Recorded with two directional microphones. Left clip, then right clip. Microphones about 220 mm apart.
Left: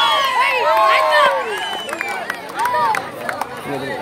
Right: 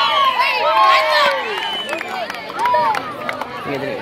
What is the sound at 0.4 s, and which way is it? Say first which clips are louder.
Run: even; 35° left (ahead or behind).